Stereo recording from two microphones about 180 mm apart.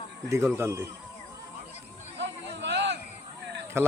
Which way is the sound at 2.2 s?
80° right.